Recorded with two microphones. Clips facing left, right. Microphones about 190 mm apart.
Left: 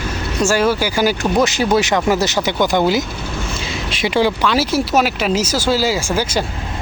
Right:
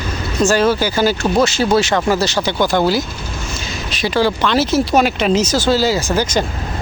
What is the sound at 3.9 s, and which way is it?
Speech, 25° left (ahead or behind).